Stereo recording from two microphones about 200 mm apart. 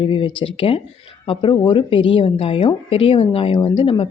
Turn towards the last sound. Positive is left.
turn(degrees=25)  # may be behind; listen again after turning